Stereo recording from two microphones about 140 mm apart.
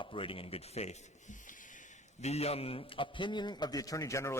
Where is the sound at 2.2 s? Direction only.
50° left (ahead or behind); by 4.3 s 20° left (ahead or behind).